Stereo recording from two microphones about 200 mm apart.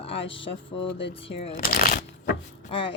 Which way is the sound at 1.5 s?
45° left (ahead or behind).